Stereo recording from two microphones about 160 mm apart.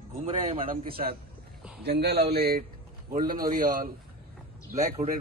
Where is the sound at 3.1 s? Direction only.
60° right (ahead or behind).